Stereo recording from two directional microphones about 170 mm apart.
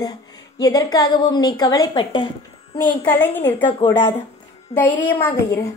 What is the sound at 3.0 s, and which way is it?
Speech, 10° left (ahead or behind).